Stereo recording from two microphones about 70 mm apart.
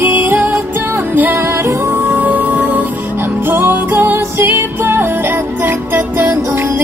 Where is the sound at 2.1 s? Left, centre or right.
Right.